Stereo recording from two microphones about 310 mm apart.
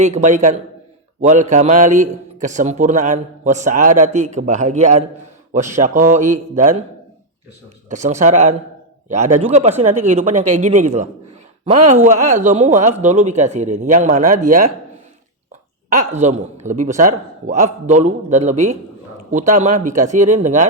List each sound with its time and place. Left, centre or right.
0.0 s a man's voice: right
7.9 s a man's voice: right
15.9 s a man's voice: right